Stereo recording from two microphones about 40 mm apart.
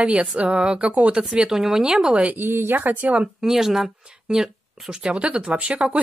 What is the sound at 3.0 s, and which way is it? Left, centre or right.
Speech, right.